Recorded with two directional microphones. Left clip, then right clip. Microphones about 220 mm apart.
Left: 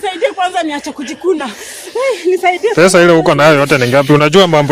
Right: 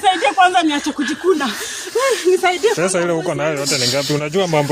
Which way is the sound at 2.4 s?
15° right (ahead or behind).